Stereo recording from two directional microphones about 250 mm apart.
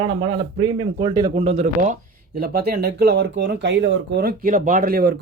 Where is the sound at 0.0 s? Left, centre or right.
Right.